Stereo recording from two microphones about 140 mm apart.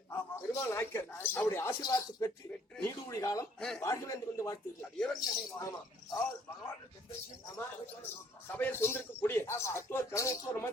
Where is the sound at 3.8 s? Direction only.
20° left (ahead or behind).